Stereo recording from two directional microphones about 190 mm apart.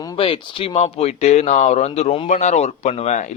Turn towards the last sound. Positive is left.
turn(degrees=40)  # may be behind; listen again after turning